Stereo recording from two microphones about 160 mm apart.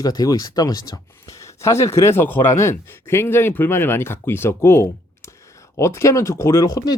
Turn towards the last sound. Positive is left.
turn(degrees=25)  # may be behind; listen again after turning